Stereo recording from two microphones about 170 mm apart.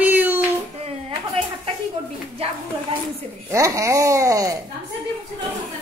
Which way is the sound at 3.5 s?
20° right (ahead or behind).